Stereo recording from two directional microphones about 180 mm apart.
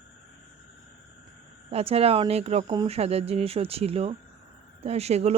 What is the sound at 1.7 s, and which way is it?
Speech, 35° right (ahead or behind).